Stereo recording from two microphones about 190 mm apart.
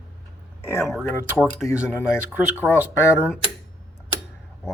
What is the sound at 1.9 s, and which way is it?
Speech, 10° left (ahead or behind).